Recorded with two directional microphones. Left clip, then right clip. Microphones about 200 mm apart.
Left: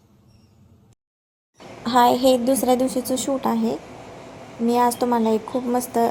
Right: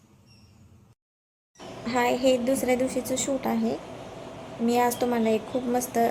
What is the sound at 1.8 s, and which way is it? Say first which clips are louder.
A woman's voice: left 7 dB; 30° left (ahead or behind).